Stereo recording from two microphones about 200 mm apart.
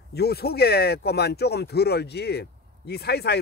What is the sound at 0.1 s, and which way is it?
Speech, 50° left (ahead or behind).